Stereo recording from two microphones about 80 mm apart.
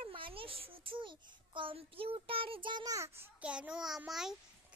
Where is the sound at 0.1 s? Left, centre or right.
Right.